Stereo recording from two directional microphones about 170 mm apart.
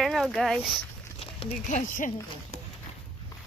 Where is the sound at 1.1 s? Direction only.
40° left (ahead or behind).